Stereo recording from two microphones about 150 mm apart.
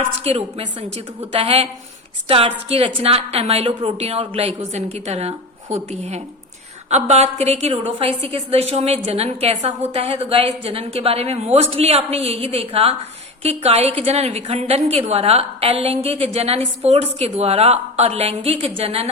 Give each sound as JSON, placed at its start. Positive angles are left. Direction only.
{"t": 0.3, "sound": "a woman's voice", "side_deg": -40}